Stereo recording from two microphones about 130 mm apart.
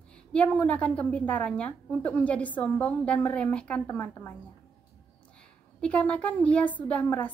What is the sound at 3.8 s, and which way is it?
Speech, 20° left (ahead or behind).